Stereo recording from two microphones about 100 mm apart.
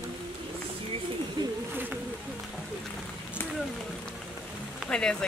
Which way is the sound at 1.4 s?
50° right (ahead or behind).